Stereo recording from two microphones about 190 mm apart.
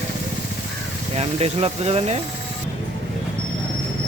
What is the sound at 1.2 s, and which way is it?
Speech, 30° right (ahead or behind).